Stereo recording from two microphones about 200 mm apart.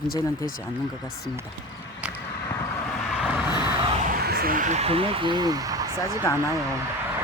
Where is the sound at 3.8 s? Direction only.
40° right (ahead or behind); by 6.3 s 15° right (ahead or behind).